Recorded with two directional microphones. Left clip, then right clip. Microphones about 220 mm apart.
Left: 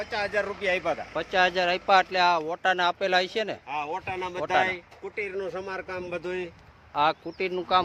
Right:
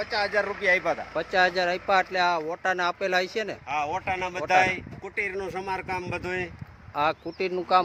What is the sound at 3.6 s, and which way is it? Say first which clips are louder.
Speech: right 4 dB; 30° right (ahead or behind).